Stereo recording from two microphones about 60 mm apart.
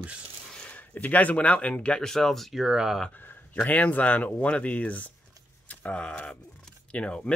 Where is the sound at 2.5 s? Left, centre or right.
Centre.